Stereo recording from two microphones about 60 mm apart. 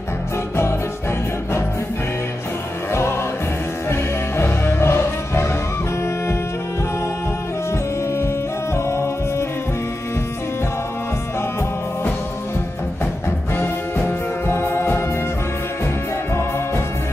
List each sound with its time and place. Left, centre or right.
2.9 s music: left
8.7 s music: left
13.6 s music: left
16.3 s music: left